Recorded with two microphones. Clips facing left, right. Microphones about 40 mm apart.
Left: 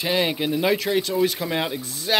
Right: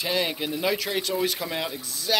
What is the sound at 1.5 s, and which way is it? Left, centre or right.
Speech, left.